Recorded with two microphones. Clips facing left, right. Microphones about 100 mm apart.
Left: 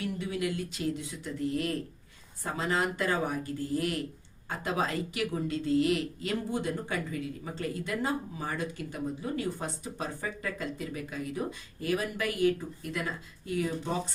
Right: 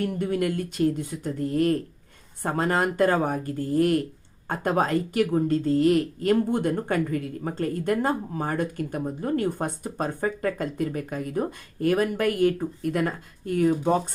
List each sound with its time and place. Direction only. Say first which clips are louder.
0.0 s a woman's voice: right 7 dB; 50° right (ahead or behind)